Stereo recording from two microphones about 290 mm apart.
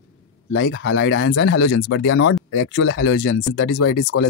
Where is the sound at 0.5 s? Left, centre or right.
Left.